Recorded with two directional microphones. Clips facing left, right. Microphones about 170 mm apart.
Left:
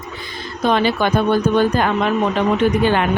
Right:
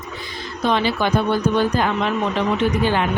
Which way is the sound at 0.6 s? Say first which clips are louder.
Left 3 dB; 50° left (ahead or behind).